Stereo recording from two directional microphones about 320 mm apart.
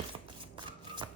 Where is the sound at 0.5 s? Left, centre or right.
Centre.